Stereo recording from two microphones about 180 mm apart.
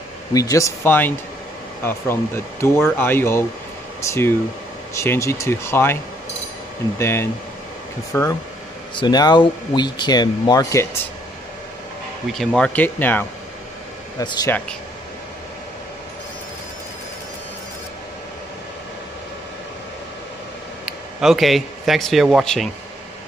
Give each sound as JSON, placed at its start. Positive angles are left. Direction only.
{"t": 0.3, "sound": "speech", "side_deg": 20}
{"t": 7.0, "sound": "speech", "side_deg": 15}
{"t": 12.3, "sound": "speech", "side_deg": 0}
{"t": 14.2, "sound": "speech", "side_deg": 25}
{"t": 20.8, "sound": "speech", "side_deg": 0}